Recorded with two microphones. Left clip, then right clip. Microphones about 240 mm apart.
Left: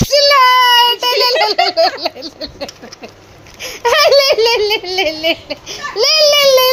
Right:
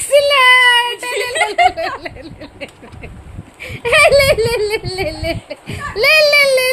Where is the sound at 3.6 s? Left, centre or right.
Centre.